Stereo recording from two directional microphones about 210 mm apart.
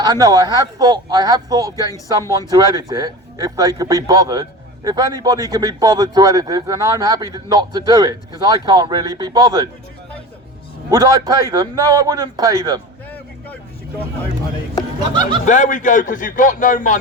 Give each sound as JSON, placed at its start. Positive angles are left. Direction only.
{"t": 0.0, "sound": "speech", "side_deg": -20}
{"t": 1.7, "sound": "speech", "side_deg": 15}
{"t": 2.5, "sound": "speech", "side_deg": -15}
{"t": 10.8, "sound": "speech", "side_deg": -15}
{"t": 15.4, "sound": "speech", "side_deg": 35}